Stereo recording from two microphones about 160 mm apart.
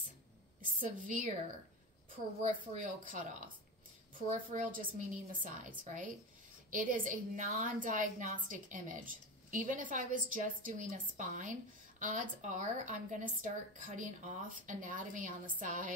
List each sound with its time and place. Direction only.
0.6 s a woman's voice: 60° right (ahead or behind)
2.4 s a woman's voice: 55° right (ahead or behind)
4.5 s a woman's voice: 60° right (ahead or behind)
6.7 s a woman's voice: 55° right (ahead or behind)